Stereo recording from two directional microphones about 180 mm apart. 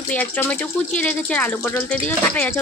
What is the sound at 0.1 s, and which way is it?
Speech, 10° left (ahead or behind).